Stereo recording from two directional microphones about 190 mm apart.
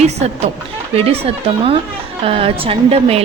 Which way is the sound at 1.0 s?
30° right (ahead or behind).